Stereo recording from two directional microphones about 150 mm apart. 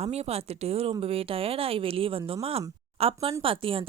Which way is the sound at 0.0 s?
45° right (ahead or behind).